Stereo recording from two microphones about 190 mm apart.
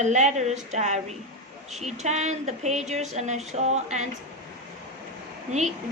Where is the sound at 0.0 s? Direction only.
40° right (ahead or behind).